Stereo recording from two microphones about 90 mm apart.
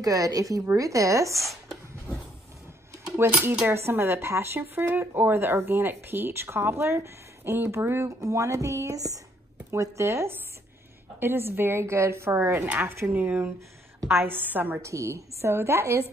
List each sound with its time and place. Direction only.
0.0 s a woman's voice: 40° right (ahead or behind)
1.4 s a sound: centre (ahead or behind)
3.2 s a woman's voice: 30° right (ahead or behind)
14.8 s a woman's voice: 35° right (ahead or behind)